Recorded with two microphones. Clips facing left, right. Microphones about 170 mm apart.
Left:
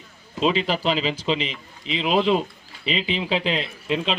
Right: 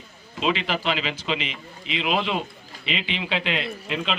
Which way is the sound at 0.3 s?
35° left (ahead or behind).